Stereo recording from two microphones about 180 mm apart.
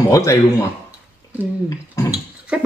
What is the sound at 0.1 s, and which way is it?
Speech, 20° left (ahead or behind).